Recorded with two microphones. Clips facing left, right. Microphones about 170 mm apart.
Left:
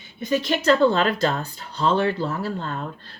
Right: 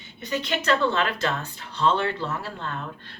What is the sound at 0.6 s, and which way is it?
Speech, 35° left (ahead or behind).